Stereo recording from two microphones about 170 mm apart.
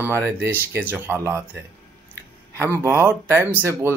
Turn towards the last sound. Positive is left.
turn(degrees=-15)  # may be behind; listen again after turning